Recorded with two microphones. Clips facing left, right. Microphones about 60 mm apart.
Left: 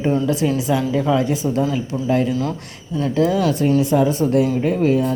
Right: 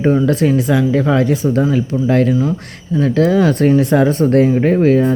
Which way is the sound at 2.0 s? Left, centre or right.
Right.